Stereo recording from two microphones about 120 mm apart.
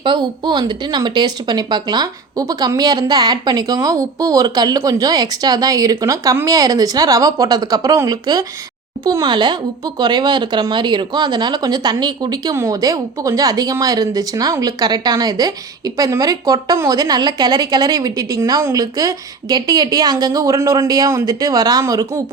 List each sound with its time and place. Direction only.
0.0 s speech: 40° right (ahead or behind)